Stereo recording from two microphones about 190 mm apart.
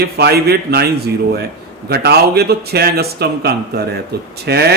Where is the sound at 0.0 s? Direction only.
55° right (ahead or behind).